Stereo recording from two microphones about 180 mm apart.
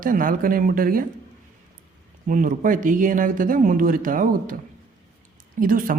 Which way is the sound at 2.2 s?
50° right (ahead or behind).